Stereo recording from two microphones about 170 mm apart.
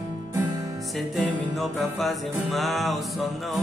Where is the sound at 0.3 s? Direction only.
20° right (ahead or behind).